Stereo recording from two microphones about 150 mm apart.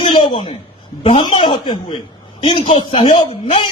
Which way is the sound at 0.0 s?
35° left (ahead or behind).